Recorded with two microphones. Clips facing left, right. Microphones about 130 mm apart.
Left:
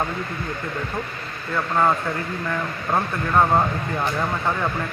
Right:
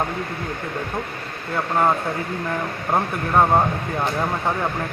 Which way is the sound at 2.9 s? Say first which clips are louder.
Right 1 dB; 15° right (ahead or behind).